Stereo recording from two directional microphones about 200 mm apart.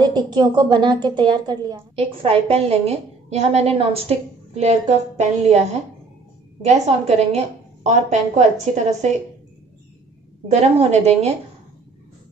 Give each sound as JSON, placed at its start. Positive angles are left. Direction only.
{"t": 0.0, "sound": "a woman's voice", "side_deg": -20}
{"t": 6.6, "sound": "a woman's voice", "side_deg": -35}
{"t": 10.5, "sound": "a woman's voice", "side_deg": -35}